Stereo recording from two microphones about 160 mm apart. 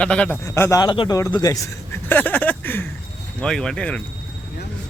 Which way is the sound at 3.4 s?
5° left (ahead or behind).